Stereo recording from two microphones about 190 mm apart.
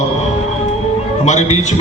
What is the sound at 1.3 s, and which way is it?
Speech, 40° left (ahead or behind).